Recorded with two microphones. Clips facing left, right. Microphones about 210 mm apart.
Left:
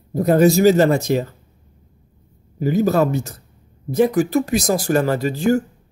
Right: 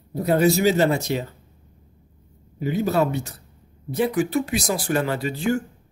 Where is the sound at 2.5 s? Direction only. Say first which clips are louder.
Left 5 dB; 40° left (ahead or behind).